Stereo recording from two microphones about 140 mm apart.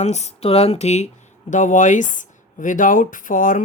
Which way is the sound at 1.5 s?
65° left (ahead or behind).